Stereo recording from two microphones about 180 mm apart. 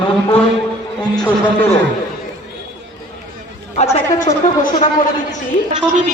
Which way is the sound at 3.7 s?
35° left (ahead or behind).